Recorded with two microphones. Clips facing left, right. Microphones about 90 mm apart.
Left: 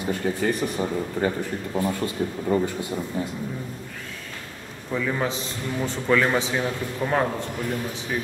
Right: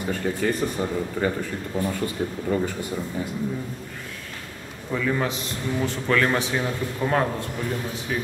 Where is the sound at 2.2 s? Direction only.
45° right (ahead or behind).